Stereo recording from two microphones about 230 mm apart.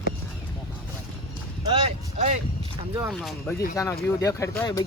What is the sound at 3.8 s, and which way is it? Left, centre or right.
Speech, centre.